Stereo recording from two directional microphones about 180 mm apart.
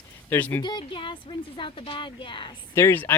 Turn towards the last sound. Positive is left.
turn(degrees=10)  # may be behind; listen again after turning